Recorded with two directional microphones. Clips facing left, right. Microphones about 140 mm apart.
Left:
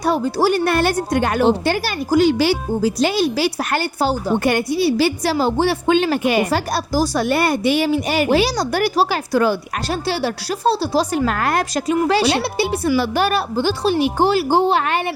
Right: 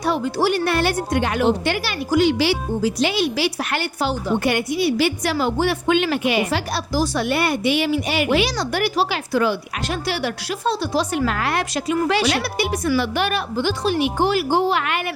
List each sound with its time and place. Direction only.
0.0 s speech: 40° left (ahead or behind)